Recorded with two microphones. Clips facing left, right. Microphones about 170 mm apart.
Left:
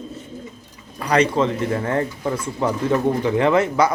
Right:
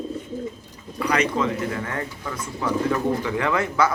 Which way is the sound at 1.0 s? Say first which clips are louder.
Left 4 dB; 35° left (ahead or behind).